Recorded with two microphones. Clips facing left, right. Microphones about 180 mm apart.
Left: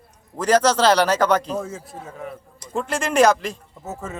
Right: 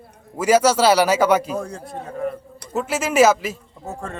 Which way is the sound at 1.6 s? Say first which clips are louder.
Right 1 dB; 5° left (ahead or behind).